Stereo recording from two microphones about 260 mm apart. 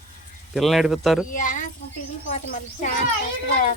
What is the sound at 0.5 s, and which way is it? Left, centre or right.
Speech, centre.